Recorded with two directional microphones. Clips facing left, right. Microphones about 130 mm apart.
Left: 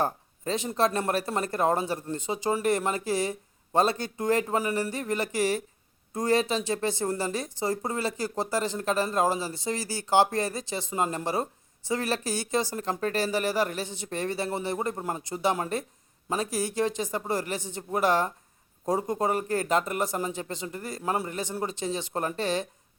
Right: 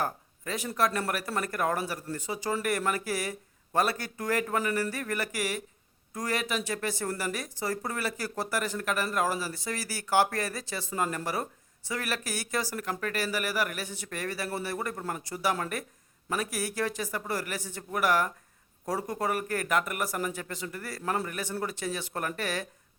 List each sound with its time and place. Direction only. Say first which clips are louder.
0.0 s speech: left 4 dB; 25° left (ahead or behind)